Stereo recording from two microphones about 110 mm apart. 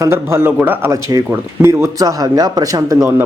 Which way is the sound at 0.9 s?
30° right (ahead or behind).